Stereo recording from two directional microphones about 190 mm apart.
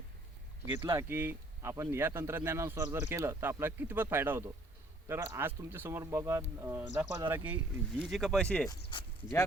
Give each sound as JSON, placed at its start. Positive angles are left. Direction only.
{"t": 0.7, "sound": "speech", "side_deg": -25}
{"t": 0.9, "sound": "speech", "side_deg": -10}